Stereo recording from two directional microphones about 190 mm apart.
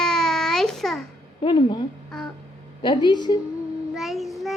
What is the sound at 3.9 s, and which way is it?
Child singing, centre (ahead or behind).